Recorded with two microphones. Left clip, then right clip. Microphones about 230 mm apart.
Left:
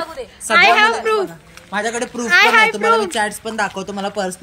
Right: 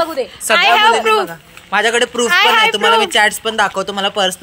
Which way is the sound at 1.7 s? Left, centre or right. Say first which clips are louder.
Right 8 dB; centre.